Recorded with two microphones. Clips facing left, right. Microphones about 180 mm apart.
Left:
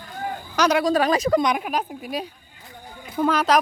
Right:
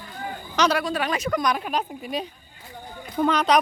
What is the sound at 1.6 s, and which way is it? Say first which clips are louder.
A woman's voice: left 1 dB; 5° left (ahead or behind).